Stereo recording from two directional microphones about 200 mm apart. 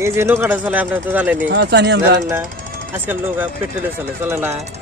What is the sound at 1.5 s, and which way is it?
Speech, 60° right (ahead or behind).